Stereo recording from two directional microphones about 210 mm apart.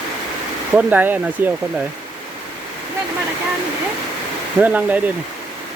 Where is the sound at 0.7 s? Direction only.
10° right (ahead or behind).